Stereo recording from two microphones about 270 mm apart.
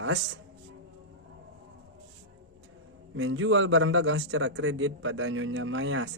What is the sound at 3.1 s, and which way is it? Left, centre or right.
Speech, right.